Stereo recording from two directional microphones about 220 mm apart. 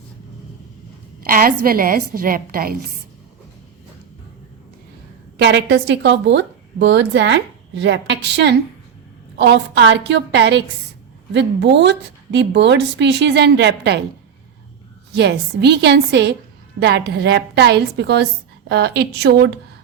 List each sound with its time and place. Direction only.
1.2 s a woman's voice: 40° right (ahead or behind)
5.4 s a woman's voice: 50° right (ahead or behind)
15.1 s a woman's voice: 50° right (ahead or behind)